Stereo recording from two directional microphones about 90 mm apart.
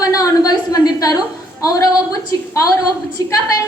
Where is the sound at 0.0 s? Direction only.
45° left (ahead or behind).